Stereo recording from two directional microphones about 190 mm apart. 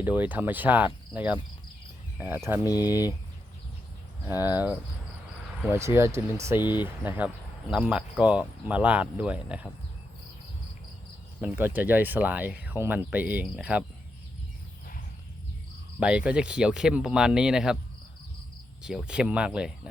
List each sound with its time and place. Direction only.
0.0 s speech: 10° right (ahead or behind)
2.6 s speech: 20° left (ahead or behind)
4.3 s speech: 10° right (ahead or behind)
11.3 s speech: 10° right (ahead or behind)
16.0 s speech: 5° right (ahead or behind)
18.8 s speech: 5° right (ahead or behind)